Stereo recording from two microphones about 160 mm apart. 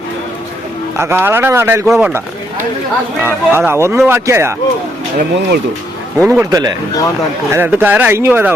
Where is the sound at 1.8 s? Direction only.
Centre (ahead or behind).